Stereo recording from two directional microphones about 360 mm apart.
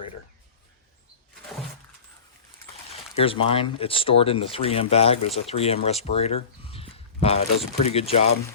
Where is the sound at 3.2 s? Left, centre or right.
Centre.